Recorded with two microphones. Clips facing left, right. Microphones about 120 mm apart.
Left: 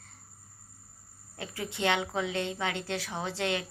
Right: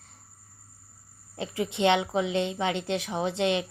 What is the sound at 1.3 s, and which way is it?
A woman's voice, 20° right (ahead or behind).